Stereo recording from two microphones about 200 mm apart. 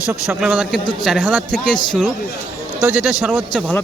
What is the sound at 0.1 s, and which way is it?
Speech, 5° right (ahead or behind).